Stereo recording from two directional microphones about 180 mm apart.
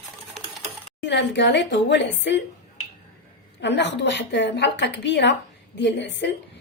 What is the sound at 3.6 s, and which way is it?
A woman's voice, 75° left (ahead or behind).